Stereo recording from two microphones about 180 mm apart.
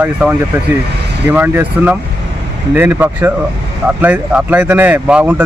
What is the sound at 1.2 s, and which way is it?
Speech, 10° right (ahead or behind).